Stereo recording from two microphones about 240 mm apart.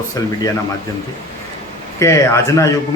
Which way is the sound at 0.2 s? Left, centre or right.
Centre.